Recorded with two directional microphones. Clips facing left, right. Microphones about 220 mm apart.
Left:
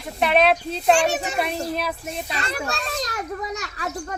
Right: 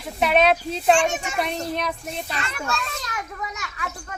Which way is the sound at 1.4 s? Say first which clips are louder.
Left 1 dB; 5° left (ahead or behind).